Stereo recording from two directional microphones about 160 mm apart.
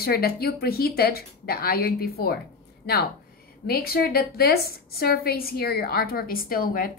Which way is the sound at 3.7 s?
75° left (ahead or behind).